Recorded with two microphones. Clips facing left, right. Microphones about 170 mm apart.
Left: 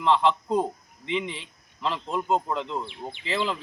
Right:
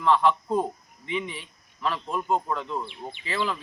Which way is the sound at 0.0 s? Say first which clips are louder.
Even; 25° left (ahead or behind).